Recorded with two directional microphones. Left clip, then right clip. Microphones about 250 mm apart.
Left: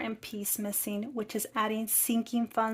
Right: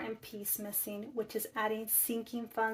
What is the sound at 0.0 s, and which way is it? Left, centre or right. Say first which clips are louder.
Speech: left 5 dB; left.